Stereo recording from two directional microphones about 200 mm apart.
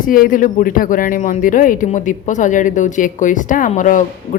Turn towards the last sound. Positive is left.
turn(degrees=40)  # may be behind; listen again after turning